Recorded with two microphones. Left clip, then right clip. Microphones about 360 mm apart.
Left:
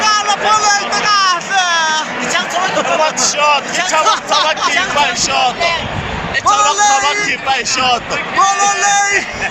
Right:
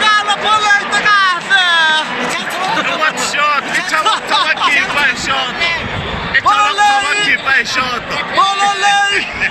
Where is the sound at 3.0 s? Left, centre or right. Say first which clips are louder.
Left 1 dB; centre.